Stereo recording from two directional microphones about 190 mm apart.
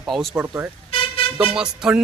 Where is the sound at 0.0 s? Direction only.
Centre (ahead or behind).